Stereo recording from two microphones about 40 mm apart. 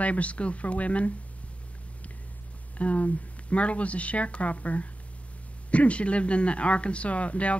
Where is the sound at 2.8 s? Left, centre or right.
Left.